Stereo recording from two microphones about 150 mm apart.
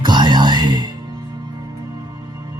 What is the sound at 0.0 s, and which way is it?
Music, 30° right (ahead or behind).